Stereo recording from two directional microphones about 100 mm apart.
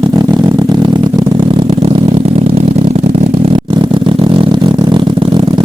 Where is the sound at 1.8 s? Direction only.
75° right (ahead or behind).